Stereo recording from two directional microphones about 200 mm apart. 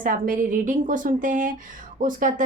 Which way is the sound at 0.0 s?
40° right (ahead or behind).